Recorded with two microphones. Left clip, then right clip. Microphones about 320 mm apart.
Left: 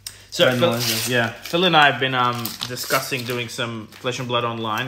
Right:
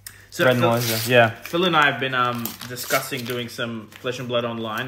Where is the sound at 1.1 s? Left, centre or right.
Right.